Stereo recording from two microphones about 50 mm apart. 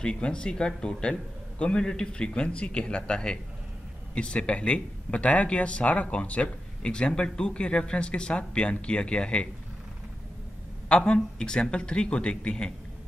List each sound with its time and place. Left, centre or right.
0.0 s speech: centre
10.9 s speech: centre